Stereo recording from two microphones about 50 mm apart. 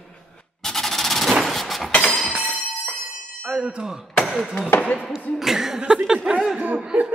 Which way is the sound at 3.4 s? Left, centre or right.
Centre.